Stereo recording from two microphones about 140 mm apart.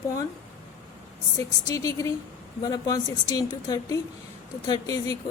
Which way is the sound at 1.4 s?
25° left (ahead or behind).